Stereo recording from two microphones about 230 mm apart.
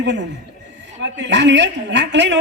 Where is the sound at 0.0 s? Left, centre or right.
Right.